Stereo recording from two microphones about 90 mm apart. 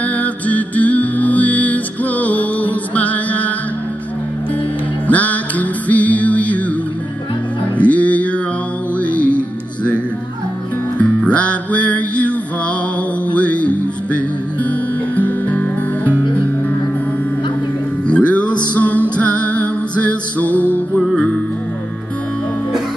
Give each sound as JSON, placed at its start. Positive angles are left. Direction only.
{"t": 0.0, "sound": "music", "side_deg": 15}
{"t": 5.0, "sound": "music", "side_deg": 15}
{"t": 7.8, "sound": "music", "side_deg": 15}
{"t": 11.0, "sound": "music", "side_deg": 15}
{"t": 18.0, "sound": "music", "side_deg": 15}